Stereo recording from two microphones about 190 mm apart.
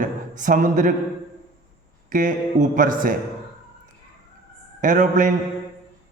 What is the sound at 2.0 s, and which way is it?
A man's voice, 45° right (ahead or behind).